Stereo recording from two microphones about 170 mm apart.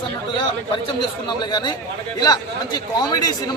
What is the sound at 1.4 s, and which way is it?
Speech, 25° left (ahead or behind).